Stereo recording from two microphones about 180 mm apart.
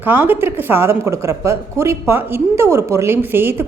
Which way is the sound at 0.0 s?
10° right (ahead or behind).